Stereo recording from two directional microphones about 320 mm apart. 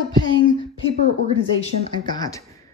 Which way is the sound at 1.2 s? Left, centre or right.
Centre.